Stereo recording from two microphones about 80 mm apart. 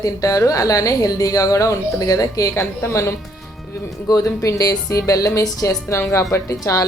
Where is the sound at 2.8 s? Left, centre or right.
Left.